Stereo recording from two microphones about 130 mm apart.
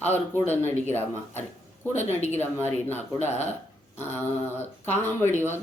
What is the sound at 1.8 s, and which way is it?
Speech, 15° left (ahead or behind).